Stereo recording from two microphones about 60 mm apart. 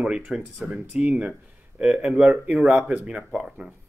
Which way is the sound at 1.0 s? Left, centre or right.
Right.